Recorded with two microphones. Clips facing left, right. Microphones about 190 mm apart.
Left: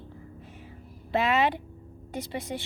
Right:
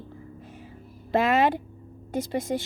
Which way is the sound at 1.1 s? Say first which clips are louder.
Right 3 dB; 45° right (ahead or behind).